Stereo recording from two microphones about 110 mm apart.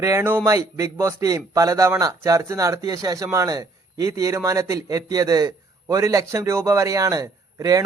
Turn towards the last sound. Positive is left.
turn(degrees=-35)  # may be behind; listen again after turning